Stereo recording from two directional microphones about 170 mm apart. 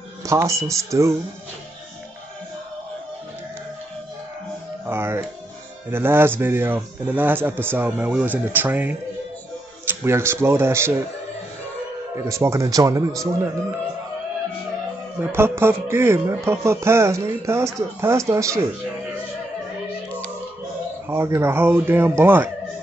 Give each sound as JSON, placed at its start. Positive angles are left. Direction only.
{"t": 0.2, "sound": "speech", "side_deg": -15}
{"t": 4.8, "sound": "speech", "side_deg": -15}
{"t": 12.3, "sound": "speech", "side_deg": -15}
{"t": 15.1, "sound": "speech", "side_deg": -15}
{"t": 21.1, "sound": "speech", "side_deg": -15}